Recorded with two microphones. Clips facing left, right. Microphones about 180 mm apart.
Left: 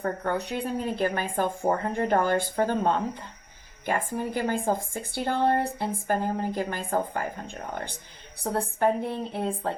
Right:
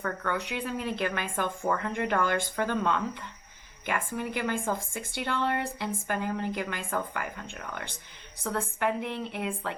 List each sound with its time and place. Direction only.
0.0 s speech: 35° left (ahead or behind)